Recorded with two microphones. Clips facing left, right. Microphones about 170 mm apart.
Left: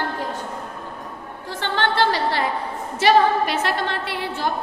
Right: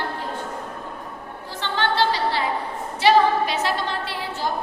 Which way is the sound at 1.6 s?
55° left (ahead or behind).